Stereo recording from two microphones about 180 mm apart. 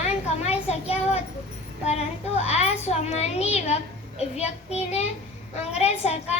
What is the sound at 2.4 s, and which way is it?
A child's voice, 35° left (ahead or behind).